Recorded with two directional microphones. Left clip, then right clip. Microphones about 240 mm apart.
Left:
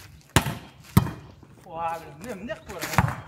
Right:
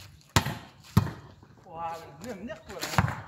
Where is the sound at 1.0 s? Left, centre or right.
Left.